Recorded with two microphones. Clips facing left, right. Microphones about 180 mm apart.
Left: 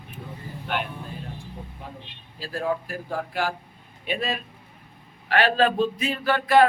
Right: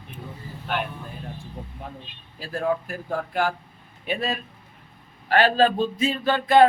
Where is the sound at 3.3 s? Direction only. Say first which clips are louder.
Right 3 dB; 45° right (ahead or behind).